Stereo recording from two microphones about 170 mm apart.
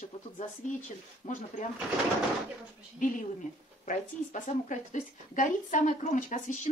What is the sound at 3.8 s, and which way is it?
A woman's voice, 45° left (ahead or behind).